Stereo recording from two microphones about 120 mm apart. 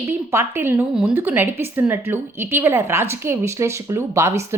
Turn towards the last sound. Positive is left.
turn(degrees=-25)  # may be behind; listen again after turning